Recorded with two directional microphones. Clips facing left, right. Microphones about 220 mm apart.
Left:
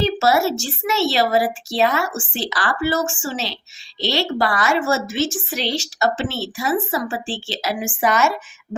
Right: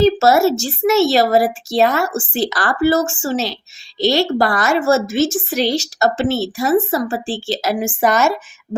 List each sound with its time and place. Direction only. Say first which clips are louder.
0.0 s speech: right 6 dB; 45° right (ahead or behind)